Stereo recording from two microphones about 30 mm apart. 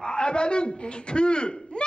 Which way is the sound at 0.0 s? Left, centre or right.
Left.